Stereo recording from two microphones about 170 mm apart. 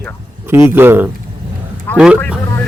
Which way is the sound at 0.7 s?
10° right (ahead or behind).